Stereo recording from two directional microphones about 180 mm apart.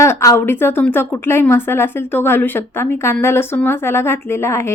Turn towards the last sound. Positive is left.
turn(degrees=15)  # may be behind; listen again after turning